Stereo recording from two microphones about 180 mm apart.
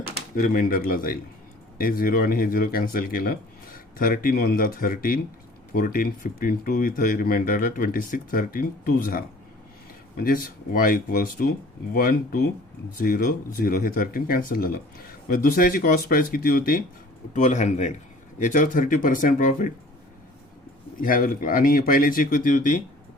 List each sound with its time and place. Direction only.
0.3 s speech: 50° left (ahead or behind)
17.3 s a man's voice: 40° left (ahead or behind)
21.0 s speech: 50° left (ahead or behind)